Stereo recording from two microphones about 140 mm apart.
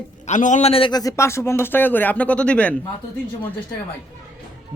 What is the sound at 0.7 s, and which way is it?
Speech, 35° left (ahead or behind).